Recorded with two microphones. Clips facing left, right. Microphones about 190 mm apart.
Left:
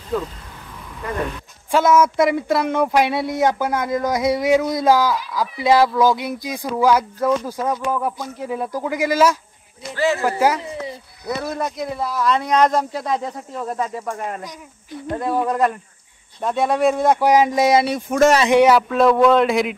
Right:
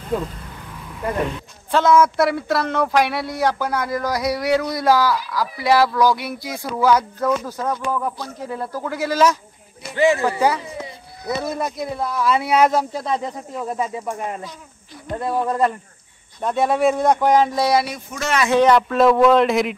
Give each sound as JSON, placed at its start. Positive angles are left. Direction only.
{"t": 1.7, "sound": "speech", "side_deg": 10}
{"t": 9.9, "sound": "speech", "side_deg": -15}
{"t": 10.2, "sound": "speech", "side_deg": 10}
{"t": 11.2, "sound": "speech", "side_deg": -5}
{"t": 15.4, "sound": "speech", "side_deg": 0}